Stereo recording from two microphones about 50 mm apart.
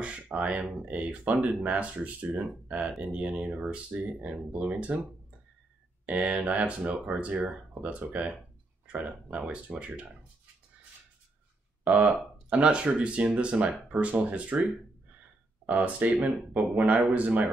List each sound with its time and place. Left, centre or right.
0.0 s speech: right
6.0 s speech: right
11.8 s speech: right